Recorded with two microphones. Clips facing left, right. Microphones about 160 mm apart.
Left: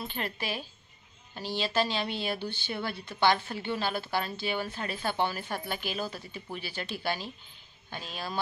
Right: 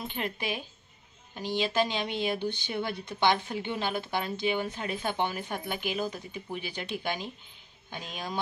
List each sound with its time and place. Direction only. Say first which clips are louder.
0.0 s speech: right 1 dB; 15° right (ahead or behind)